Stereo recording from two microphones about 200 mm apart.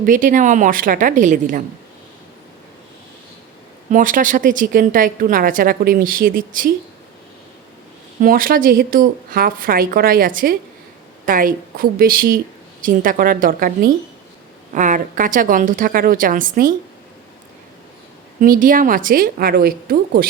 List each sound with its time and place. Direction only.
0.0 s a woman's voice: 40° right (ahead or behind)
3.9 s a woman's voice: 40° right (ahead or behind)
8.2 s a woman's voice: 45° right (ahead or behind)
18.3 s a woman's voice: 45° right (ahead or behind)